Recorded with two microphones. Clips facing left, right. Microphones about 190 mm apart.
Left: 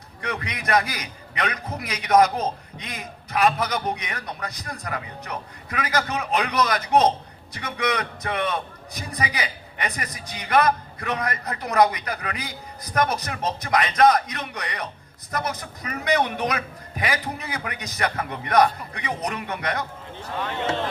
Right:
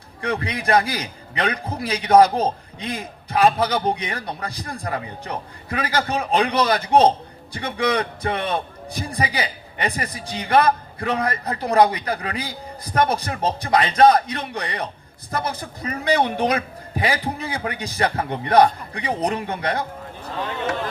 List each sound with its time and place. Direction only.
0.2 s a man's voice: 30° right (ahead or behind)